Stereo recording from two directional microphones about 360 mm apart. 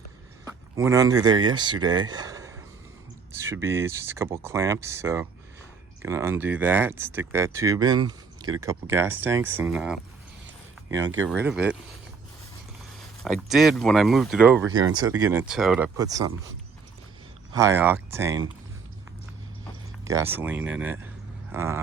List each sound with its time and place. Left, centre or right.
0.8 s speech: centre
11.0 s speech: right
11.3 s speech: centre
13.2 s speech: centre
17.5 s speech: centre
20.1 s speech: centre
21.5 s a sound: centre